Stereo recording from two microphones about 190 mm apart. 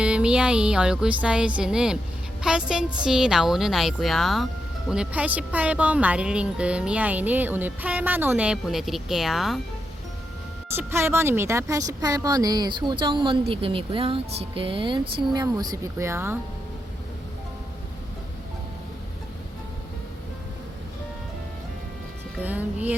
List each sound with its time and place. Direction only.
0.0 s a woman's voice: 5° right (ahead or behind)
10.8 s speech: 10° right (ahead or behind)
22.4 s music: 10° right (ahead or behind)